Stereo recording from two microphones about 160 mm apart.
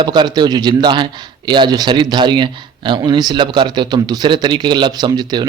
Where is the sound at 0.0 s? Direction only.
25° right (ahead or behind).